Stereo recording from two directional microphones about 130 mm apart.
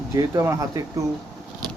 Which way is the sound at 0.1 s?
25° right (ahead or behind).